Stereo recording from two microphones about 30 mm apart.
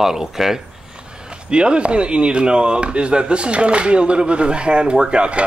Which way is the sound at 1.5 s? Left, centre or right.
Right.